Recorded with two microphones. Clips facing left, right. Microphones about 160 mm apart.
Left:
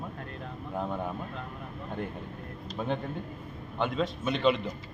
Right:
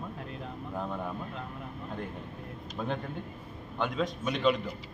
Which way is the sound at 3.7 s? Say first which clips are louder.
Left 1 dB; centre (ahead or behind).